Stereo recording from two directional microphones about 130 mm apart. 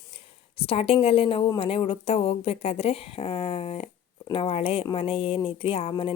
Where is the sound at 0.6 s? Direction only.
45° left (ahead or behind).